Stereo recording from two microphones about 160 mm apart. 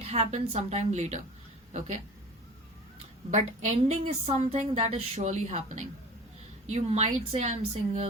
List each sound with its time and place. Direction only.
0.0 s a woman's voice: 40° right (ahead or behind)
3.3 s a woman's voice: 45° right (ahead or behind)
6.7 s a woman's voice: 45° right (ahead or behind)